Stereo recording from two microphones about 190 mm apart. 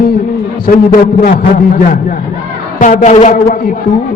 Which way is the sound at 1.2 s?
45° left (ahead or behind).